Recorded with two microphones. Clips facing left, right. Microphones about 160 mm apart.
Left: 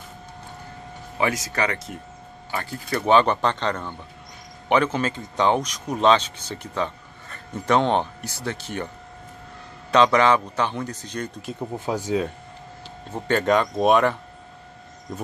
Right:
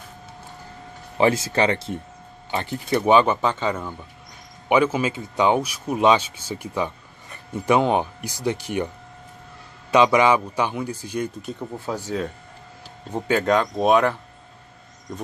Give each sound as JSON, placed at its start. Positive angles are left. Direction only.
{"t": 1.1, "sound": "speech", "side_deg": -30}
{"t": 3.2, "sound": "speech", "side_deg": -5}
{"t": 9.9, "sound": "speech", "side_deg": -10}
{"t": 11.7, "sound": "speech", "side_deg": 20}
{"t": 13.3, "sound": "speech", "side_deg": 0}